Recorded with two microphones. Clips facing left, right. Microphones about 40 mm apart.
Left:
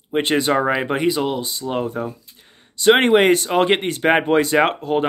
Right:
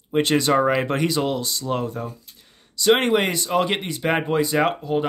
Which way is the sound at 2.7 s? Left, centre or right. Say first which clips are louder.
Left 4 dB; left.